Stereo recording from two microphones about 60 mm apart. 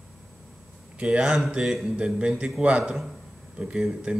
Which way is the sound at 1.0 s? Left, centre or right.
Centre.